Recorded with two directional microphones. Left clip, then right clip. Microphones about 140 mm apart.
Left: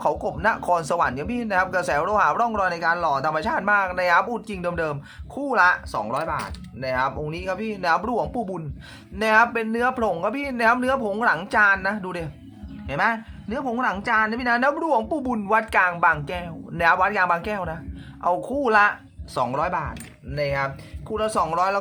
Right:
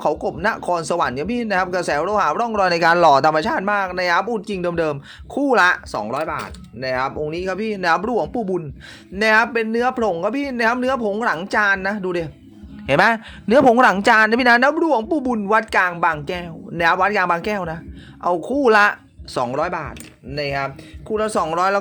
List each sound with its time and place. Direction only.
0.0 s speech: 25° right (ahead or behind)
2.6 s speech: 50° right (ahead or behind); by 12.3 s 35° right (ahead or behind)
12.8 s speech: 70° right (ahead or behind)
14.6 s speech: 30° right (ahead or behind)
18.7 s speech: 55° right (ahead or behind)
19.3 s speech: 35° right (ahead or behind)